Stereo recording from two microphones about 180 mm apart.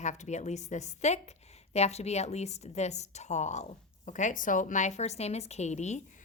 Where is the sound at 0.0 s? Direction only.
40° left (ahead or behind).